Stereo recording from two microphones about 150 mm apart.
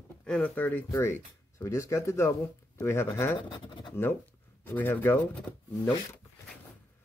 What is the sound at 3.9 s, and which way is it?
Speech, 15° left (ahead or behind).